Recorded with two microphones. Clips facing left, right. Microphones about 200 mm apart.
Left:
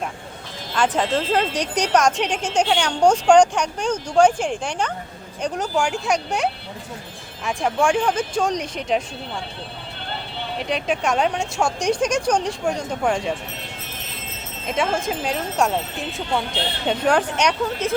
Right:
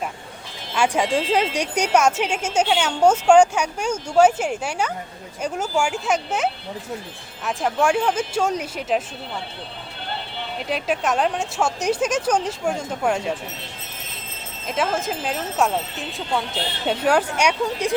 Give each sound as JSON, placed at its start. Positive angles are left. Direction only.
{"t": 0.7, "sound": "speech", "side_deg": -10}
{"t": 10.6, "sound": "speech", "side_deg": -5}
{"t": 14.7, "sound": "speech", "side_deg": 0}